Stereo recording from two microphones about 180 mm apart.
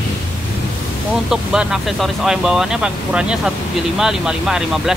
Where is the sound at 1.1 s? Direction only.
5° right (ahead or behind).